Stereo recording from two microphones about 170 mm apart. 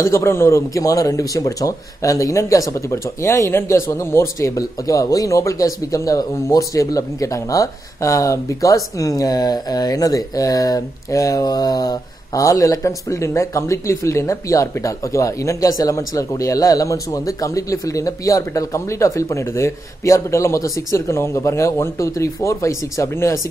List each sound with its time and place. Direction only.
0.0 s speech: 15° left (ahead or behind)